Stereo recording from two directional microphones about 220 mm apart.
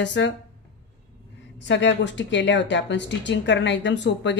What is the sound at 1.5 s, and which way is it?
Speech, 55° left (ahead or behind).